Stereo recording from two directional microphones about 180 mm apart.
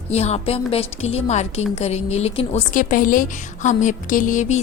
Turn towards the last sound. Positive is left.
turn(degrees=40)  # may be behind; listen again after turning